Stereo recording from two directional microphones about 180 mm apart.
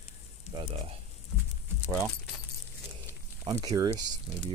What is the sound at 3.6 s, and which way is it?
Speech, 20° right (ahead or behind).